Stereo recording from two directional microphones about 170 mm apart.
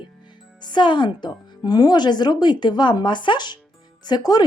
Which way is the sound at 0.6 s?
25° left (ahead or behind).